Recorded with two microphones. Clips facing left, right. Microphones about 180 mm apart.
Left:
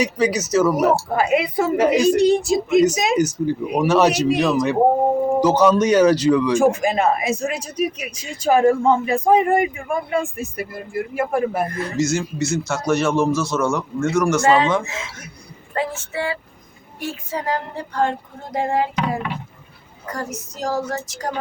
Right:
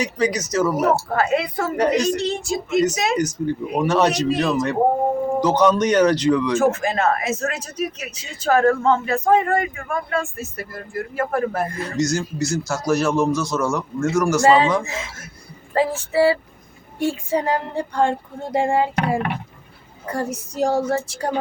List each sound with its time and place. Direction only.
0.0 s speech: 10° left (ahead or behind)
4.4 s a man's voice: centre (ahead or behind)
14.4 s a woman's voice: 25° right (ahead or behind)
15.7 s a woman's voice: 35° right (ahead or behind)
20.1 s a woman's voice: 30° right (ahead or behind)